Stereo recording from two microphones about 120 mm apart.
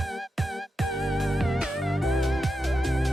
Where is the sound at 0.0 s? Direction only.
Centre (ahead or behind).